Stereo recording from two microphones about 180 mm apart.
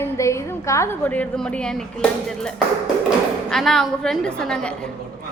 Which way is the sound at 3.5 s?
Centre (ahead or behind).